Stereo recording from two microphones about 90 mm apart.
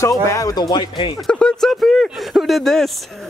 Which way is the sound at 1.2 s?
5° left (ahead or behind).